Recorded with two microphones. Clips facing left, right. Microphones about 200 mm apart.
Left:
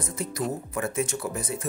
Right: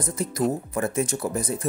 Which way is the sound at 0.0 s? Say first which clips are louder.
Right 5 dB; 35° right (ahead or behind).